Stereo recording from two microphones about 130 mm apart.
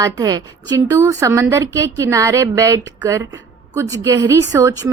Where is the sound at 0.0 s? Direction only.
30° right (ahead or behind).